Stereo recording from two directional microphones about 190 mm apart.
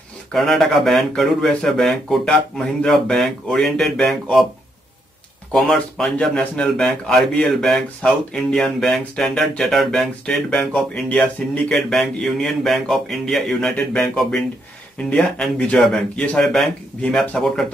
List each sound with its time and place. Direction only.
0.3 s speech: centre (ahead or behind)
5.5 s speech: 5° left (ahead or behind)